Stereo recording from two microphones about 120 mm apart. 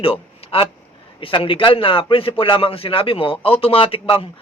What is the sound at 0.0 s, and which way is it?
Speech, 50° left (ahead or behind).